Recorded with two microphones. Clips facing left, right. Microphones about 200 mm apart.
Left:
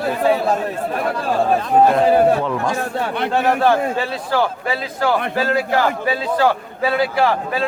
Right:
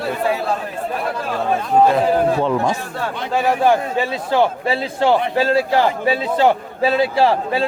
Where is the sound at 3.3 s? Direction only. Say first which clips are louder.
Right 1 dB; 10° right (ahead or behind).